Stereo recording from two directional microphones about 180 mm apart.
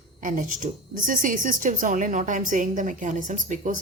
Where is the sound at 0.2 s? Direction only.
45° right (ahead or behind).